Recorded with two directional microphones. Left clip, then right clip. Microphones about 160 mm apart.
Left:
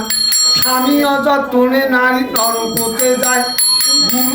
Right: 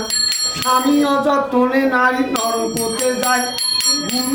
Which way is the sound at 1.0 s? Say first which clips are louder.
Left 3 dB; 20° right (ahead or behind).